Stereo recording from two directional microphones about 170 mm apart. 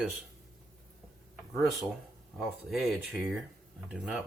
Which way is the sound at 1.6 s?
Centre (ahead or behind).